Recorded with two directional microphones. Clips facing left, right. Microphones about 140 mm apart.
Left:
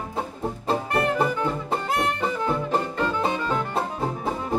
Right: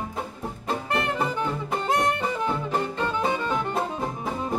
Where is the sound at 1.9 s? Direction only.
20° right (ahead or behind).